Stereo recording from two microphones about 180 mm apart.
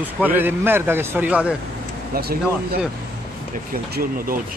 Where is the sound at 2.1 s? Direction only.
60° right (ahead or behind).